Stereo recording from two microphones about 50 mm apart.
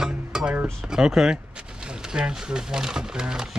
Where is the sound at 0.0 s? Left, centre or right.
Centre.